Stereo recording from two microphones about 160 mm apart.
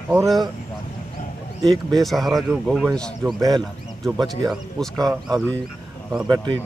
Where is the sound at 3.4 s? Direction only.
25° right (ahead or behind).